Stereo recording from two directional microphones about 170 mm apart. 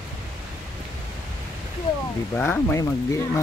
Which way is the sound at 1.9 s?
25° left (ahead or behind).